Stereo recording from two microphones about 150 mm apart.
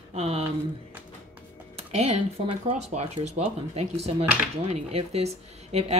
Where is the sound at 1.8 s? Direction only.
45° right (ahead or behind).